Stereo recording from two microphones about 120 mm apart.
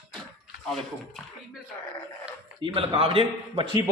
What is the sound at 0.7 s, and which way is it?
Speech, 5° left (ahead or behind).